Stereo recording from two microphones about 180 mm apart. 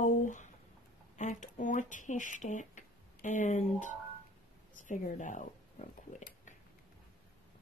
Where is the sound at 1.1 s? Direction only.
45° left (ahead or behind).